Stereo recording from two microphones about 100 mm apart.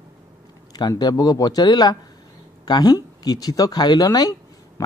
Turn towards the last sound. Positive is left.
turn(degrees=40)  # may be behind; listen again after turning